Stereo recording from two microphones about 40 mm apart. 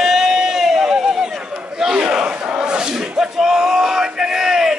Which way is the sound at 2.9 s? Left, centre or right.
Centre.